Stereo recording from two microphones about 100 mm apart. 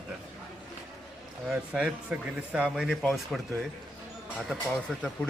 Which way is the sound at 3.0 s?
5° left (ahead or behind).